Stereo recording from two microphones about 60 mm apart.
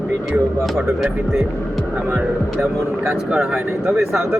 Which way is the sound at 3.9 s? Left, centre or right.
Right.